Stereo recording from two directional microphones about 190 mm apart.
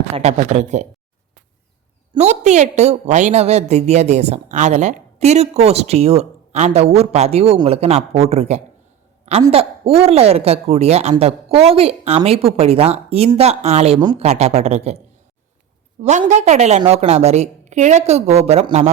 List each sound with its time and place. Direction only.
0.1 s a woman's voice: 35° right (ahead or behind)
2.1 s a woman's voice: 35° right (ahead or behind)
16.0 s a woman's voice: 35° right (ahead or behind)